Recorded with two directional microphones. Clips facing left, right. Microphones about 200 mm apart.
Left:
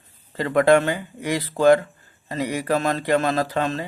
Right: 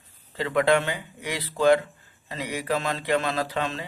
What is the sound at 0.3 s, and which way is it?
A man's voice, 45° left (ahead or behind).